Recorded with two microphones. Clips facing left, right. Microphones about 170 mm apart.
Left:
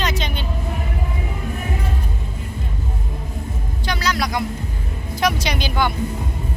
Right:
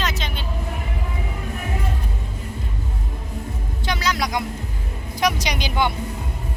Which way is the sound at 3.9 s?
20° right (ahead or behind).